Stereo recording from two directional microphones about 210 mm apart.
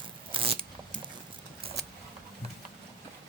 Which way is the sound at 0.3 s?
25° right (ahead or behind).